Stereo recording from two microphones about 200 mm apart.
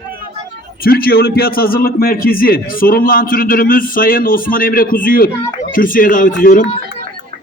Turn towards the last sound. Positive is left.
turn(degrees=45)  # may be behind; listen again after turning